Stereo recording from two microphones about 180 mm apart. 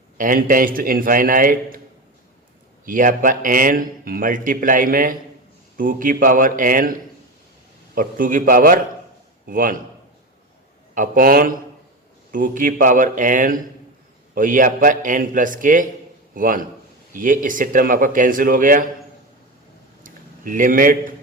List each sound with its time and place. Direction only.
0.2 s a man's voice: 50° right (ahead or behind)
2.8 s a man's voice: 50° right (ahead or behind)
7.9 s a man's voice: 50° right (ahead or behind)
10.9 s a man's voice: 50° right (ahead or behind)
20.0 s a sound: 50° right (ahead or behind)